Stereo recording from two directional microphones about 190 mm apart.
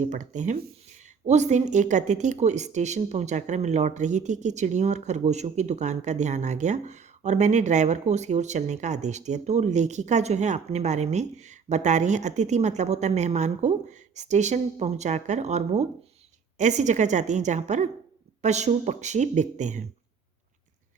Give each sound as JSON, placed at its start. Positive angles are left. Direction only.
{"t": 0.0, "sound": "speech", "side_deg": -40}